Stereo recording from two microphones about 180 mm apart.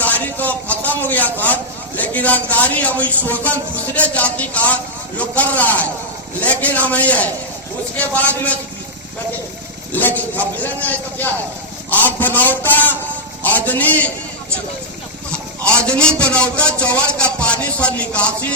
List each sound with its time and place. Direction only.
0.0 s a sound: 10° left (ahead or behind)
2.0 s speech: 10° left (ahead or behind)
9.9 s speech: 10° left (ahead or behind)
15.9 s speech: 5° left (ahead or behind)